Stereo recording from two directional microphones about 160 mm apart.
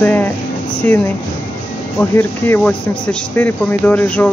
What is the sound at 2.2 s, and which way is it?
Speech, 10° left (ahead or behind).